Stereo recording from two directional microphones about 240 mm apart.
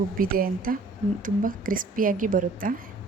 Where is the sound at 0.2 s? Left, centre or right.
Right.